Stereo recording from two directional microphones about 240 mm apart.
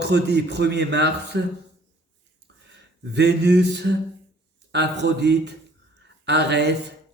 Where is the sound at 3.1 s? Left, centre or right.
Right.